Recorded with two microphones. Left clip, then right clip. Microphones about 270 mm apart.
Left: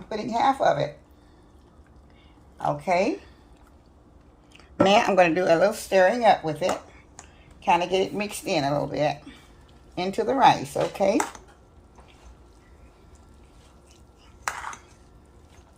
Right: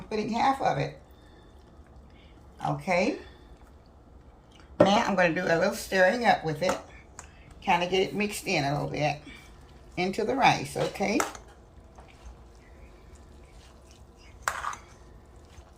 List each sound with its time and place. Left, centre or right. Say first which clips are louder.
0.1 s speech: left 3 dB; left
2.6 s speech: left 4 dB; left
4.5 s speech: left 3 dB; left